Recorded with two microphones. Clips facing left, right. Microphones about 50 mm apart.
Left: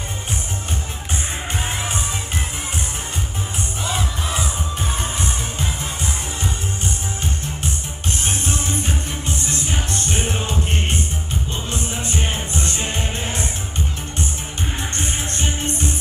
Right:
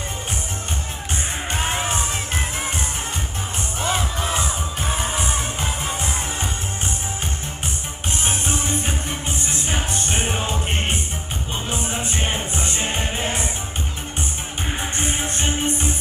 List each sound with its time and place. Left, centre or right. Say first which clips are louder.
9.8 s music: even; centre
11.7 s music: even; centre
15.2 s music: right 2 dB; centre